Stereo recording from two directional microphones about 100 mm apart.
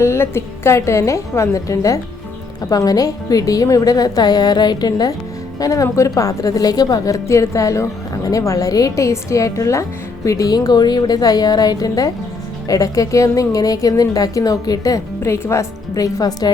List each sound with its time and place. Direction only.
0.0 s a woman's voice: 25° left (ahead or behind)